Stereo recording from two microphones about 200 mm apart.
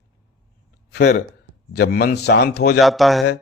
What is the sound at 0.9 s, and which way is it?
A man's voice, 45° left (ahead or behind).